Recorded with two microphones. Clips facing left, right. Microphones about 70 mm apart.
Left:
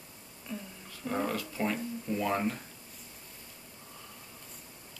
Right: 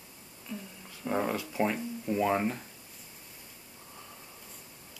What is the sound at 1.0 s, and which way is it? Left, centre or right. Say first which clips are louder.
Speech: right 2 dB; centre.